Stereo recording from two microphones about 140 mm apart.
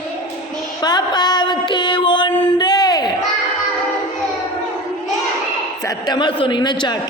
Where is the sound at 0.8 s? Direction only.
30° left (ahead or behind).